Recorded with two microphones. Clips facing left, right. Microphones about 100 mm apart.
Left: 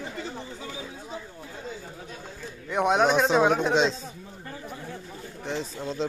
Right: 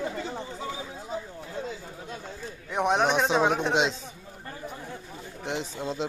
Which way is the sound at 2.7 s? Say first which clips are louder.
Left 2 dB; centre (ahead or behind).